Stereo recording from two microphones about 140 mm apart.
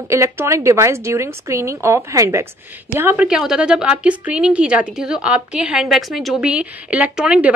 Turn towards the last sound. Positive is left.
turn(degrees=-10)  # may be behind; listen again after turning